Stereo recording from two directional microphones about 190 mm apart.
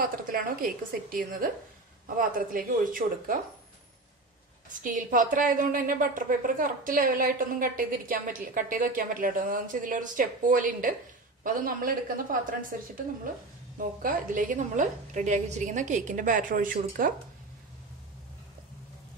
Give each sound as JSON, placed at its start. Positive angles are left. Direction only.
{"t": 0.0, "sound": "a woman's voice", "side_deg": -50}
{"t": 4.8, "sound": "a woman's voice", "side_deg": -45}